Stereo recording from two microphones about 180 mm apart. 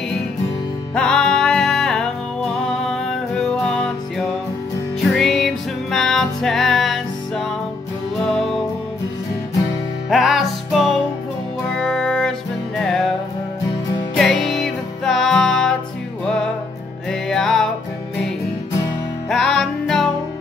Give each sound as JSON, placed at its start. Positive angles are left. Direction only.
{"t": 0.9, "sound": "music", "side_deg": 5}
{"t": 5.0, "sound": "music", "side_deg": 0}
{"t": 10.0, "sound": "music", "side_deg": 0}
{"t": 14.1, "sound": "music", "side_deg": 5}
{"t": 17.1, "sound": "music", "side_deg": 0}
{"t": 19.2, "sound": "music", "side_deg": 0}